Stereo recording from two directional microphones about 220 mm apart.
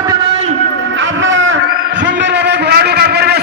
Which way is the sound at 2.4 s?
50° right (ahead or behind).